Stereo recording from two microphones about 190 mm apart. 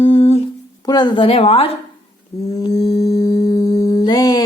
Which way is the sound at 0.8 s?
20° left (ahead or behind).